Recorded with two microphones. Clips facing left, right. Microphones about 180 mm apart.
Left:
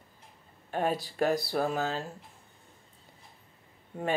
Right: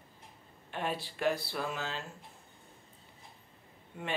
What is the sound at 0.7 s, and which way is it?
Speech, 40° left (ahead or behind).